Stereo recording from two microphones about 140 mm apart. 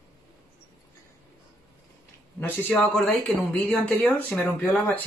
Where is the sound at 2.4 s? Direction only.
10° left (ahead or behind).